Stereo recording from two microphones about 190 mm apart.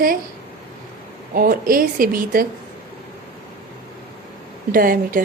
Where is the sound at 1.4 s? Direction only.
50° right (ahead or behind).